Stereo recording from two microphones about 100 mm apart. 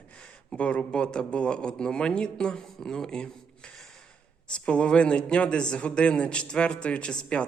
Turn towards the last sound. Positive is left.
turn(degrees=10)  # may be behind; listen again after turning